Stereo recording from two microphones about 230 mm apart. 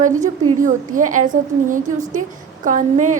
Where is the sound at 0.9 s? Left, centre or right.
Right.